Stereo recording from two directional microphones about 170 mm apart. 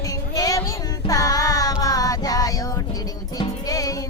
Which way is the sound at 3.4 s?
20° left (ahead or behind).